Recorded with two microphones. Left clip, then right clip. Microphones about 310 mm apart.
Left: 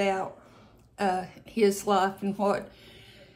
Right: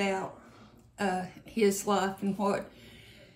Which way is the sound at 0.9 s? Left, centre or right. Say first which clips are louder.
Left 4 dB; centre.